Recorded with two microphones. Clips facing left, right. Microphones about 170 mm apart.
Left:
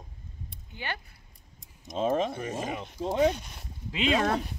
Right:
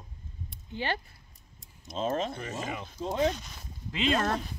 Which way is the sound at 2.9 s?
10° left (ahead or behind).